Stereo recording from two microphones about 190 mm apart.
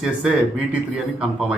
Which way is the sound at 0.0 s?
5° right (ahead or behind).